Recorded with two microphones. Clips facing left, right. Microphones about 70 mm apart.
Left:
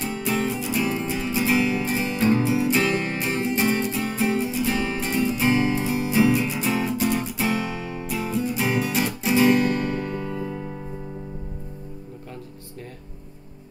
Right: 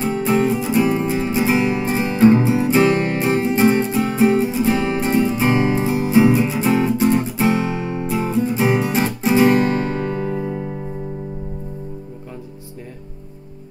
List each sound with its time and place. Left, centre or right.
0.0 s music: right